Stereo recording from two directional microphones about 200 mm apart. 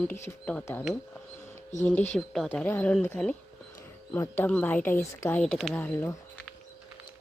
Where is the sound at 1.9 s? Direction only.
5° left (ahead or behind).